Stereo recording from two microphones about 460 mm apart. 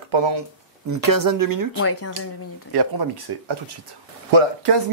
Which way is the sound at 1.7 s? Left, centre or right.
Left.